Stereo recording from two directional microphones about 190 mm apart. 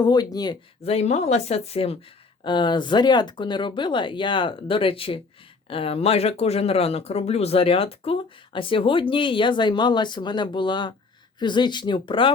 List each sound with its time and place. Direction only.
0.0 s speech: 20° left (ahead or behind)
0.8 s speech: 35° left (ahead or behind)